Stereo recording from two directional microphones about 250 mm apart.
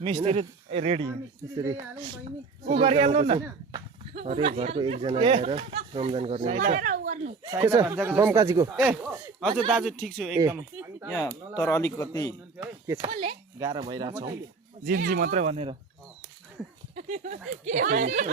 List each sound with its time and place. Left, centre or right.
0.0 s speech: right
6.6 s a sound: right
7.5 s speech: centre
11.1 s speech: centre
12.5 s chop: centre
13.6 s speech: centre
14.8 s speech: right
16.9 s speech: right